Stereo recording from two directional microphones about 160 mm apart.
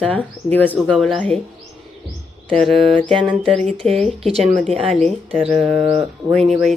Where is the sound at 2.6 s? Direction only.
35° right (ahead or behind).